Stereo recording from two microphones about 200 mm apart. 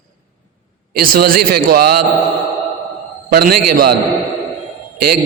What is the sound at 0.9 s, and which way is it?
A man's voice, 50° right (ahead or behind).